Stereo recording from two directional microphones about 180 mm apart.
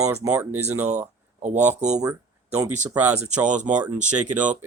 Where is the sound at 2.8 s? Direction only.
10° right (ahead or behind).